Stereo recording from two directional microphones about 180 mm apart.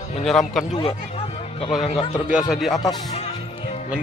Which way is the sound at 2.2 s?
5° right (ahead or behind).